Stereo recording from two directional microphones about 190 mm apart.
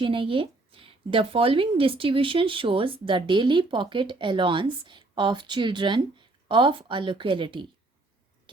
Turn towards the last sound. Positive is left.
turn(degrees=-25)  # may be behind; listen again after turning